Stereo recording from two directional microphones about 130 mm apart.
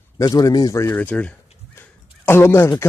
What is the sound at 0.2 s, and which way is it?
Speech, 30° left (ahead or behind).